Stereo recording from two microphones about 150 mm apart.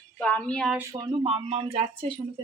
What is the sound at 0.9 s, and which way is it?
Speech, 35° right (ahead or behind).